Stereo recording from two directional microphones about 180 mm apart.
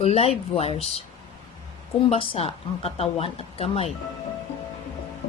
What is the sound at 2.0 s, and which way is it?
Speech, 30° left (ahead or behind).